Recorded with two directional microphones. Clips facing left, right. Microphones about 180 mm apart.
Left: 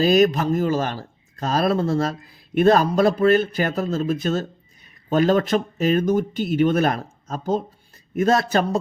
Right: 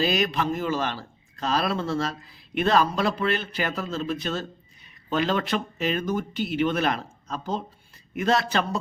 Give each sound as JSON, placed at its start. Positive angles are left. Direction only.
{"t": 0.0, "sound": "speech", "side_deg": 45}